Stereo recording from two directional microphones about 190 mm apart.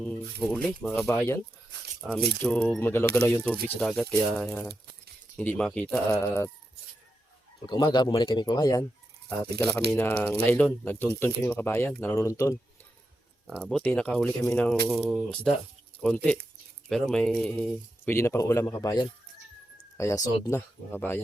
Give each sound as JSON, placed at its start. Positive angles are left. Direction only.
{"t": 0.5, "sound": "speech", "side_deg": 5}
{"t": 2.4, "sound": "speech", "side_deg": 5}
{"t": 7.7, "sound": "speech", "side_deg": 20}
{"t": 13.6, "sound": "speech", "side_deg": 5}